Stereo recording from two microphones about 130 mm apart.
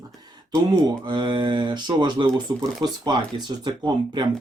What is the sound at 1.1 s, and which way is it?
Speech, 35° right (ahead or behind).